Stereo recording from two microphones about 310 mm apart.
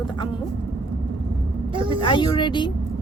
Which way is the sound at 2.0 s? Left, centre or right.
Centre.